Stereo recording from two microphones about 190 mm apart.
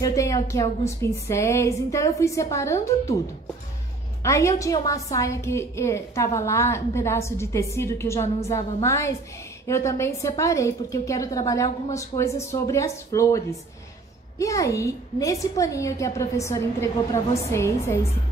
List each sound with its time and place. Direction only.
0.0 s a woman's voice: 15° left (ahead or behind)
4.2 s a woman's voice: 15° left (ahead or behind)
14.4 s a woman's voice: 15° left (ahead or behind)